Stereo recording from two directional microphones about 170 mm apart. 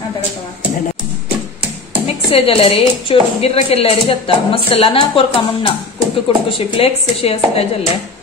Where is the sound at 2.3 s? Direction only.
35° left (ahead or behind).